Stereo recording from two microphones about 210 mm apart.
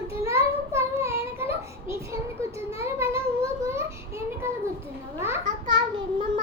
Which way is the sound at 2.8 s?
10° right (ahead or behind).